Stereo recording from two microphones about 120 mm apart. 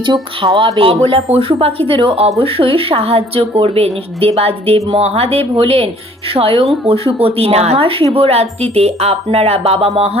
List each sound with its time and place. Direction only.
0.0 s speech: 40° right (ahead or behind); by 10.2 s 60° right (ahead or behind)